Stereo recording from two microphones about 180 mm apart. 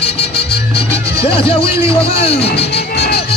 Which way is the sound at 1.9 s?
30° left (ahead or behind).